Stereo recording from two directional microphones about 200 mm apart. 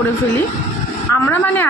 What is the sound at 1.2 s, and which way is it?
Speech, 10° left (ahead or behind).